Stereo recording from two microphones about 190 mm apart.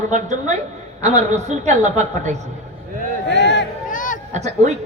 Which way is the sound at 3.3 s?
65° left (ahead or behind).